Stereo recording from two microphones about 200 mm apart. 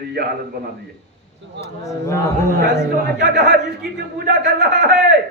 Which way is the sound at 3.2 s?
50° right (ahead or behind).